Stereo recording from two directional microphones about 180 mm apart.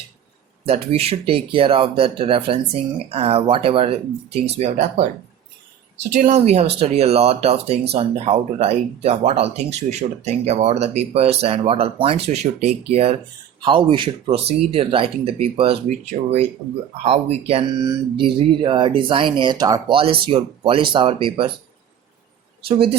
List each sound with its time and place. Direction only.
0.6 s speech: 35° right (ahead or behind)
6.1 s speech: 40° right (ahead or behind)
22.7 s speech: 30° right (ahead or behind)